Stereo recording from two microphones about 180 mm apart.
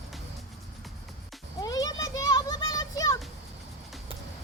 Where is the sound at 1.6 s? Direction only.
20° left (ahead or behind).